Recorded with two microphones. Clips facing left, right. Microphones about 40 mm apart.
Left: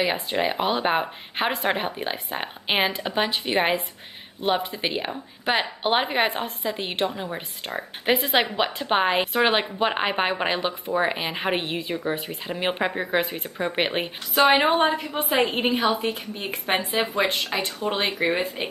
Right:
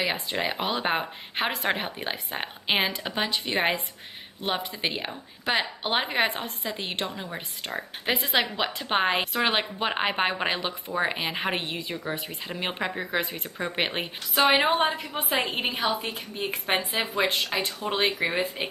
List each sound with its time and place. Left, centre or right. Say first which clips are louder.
0.0 s a woman's voice: left 4 dB; centre
3.3 s a woman's voice: left 1 dB; centre
9.2 s a woman's voice: left 4 dB; centre